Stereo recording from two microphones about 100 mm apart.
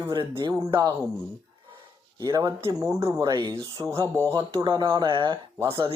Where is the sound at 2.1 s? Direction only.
35° right (ahead or behind).